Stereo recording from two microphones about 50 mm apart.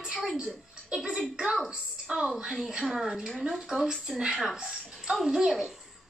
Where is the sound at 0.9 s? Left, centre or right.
Centre.